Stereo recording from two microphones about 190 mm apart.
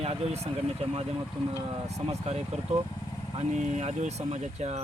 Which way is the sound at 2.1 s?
35° right (ahead or behind).